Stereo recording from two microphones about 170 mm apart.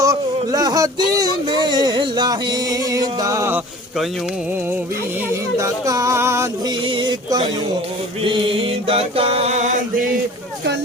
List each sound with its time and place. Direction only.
0.0 s speech: 20° right (ahead or behind)
5.3 s music: 20° right (ahead or behind)
6.8 s music: 30° right (ahead or behind)
8.2 s a sound: 30° right (ahead or behind); by 10.1 s 45° right (ahead or behind)